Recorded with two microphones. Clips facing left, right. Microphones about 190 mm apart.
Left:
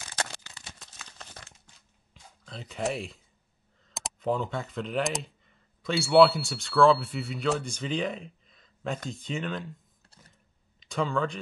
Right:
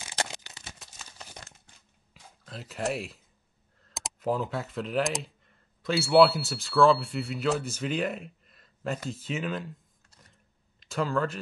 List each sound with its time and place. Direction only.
0.2 s a sound: 20° right (ahead or behind)
0.7 s crumpling: 5° right (ahead or behind)
2.4 s speech: 5° right (ahead or behind)
10.8 s speech: centre (ahead or behind)